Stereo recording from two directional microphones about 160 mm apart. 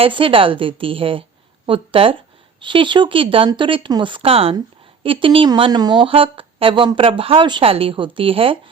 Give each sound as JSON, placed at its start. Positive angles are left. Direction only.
{"t": 0.0, "sound": "a woman's voice", "side_deg": -35}